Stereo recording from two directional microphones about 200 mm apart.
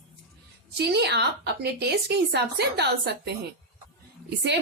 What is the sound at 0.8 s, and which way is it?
A woman's voice, 55° right (ahead or behind).